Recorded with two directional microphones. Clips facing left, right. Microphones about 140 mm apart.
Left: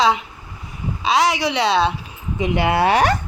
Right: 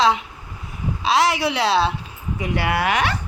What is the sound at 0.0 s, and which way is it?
A woman's voice, centre (ahead or behind).